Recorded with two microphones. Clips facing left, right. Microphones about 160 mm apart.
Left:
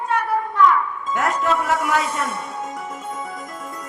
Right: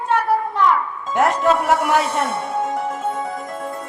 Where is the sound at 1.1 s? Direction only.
30° right (ahead or behind).